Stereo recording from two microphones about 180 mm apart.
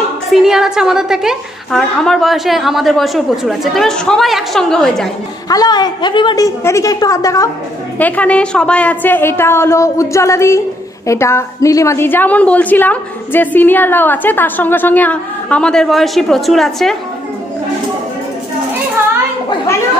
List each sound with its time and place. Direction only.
0.3 s a woman's voice: centre (ahead or behind)
5.5 s a woman's voice: 20° left (ahead or behind)
8.0 s a woman's voice: 5° left (ahead or behind)